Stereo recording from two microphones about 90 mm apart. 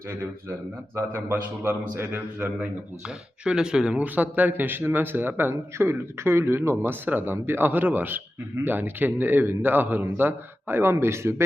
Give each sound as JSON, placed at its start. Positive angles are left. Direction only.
{"t": 0.9, "sound": "speech", "side_deg": -25}
{"t": 3.4, "sound": "speech", "side_deg": -10}